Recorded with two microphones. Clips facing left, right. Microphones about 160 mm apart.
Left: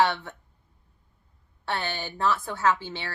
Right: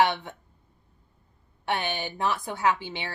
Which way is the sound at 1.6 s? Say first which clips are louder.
Right 2 dB; 15° right (ahead or behind).